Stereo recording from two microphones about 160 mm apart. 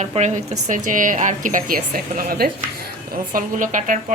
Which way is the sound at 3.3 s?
55° right (ahead or behind).